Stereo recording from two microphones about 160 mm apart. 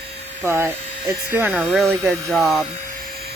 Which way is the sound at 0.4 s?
15° right (ahead or behind).